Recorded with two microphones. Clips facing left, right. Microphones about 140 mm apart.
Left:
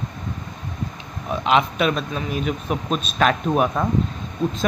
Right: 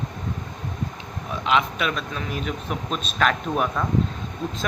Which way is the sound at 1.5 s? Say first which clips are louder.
Left 4 dB; 25° left (ahead or behind).